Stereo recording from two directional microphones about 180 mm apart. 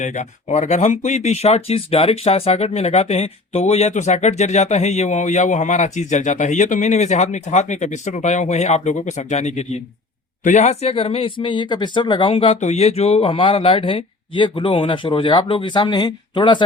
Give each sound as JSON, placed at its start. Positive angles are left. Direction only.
{"t": 0.0, "sound": "speech", "side_deg": 40}